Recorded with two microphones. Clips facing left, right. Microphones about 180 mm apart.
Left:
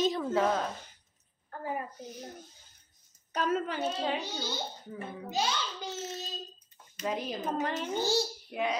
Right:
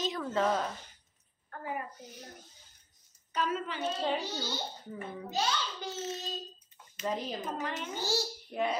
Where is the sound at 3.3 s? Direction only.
45° left (ahead or behind).